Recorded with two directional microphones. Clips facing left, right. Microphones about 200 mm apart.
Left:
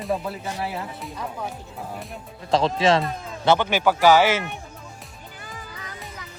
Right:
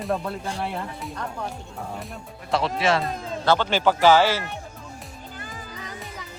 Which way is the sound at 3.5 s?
15° left (ahead or behind).